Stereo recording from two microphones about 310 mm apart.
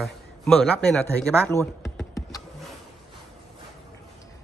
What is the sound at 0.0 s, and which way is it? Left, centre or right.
A man's voice, centre.